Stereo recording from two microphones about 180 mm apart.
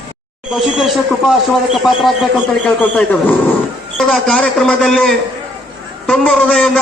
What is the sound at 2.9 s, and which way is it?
A man's voice, 10° left (ahead or behind).